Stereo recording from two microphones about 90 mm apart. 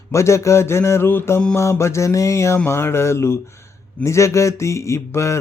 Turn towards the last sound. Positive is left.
turn(degrees=35)  # may be behind; listen again after turning